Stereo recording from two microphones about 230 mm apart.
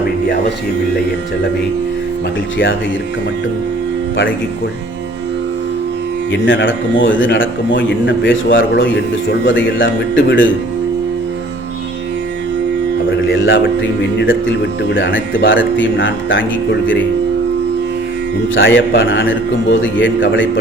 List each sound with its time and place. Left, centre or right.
6.3 s a man's voice: left
13.1 s speech: left
14.8 s a man's voice: left
18.5 s a man's voice: left